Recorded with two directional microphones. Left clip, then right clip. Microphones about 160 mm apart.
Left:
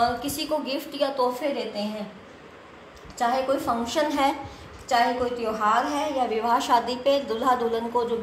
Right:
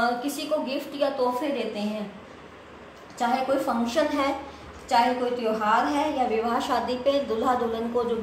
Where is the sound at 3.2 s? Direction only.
40° left (ahead or behind).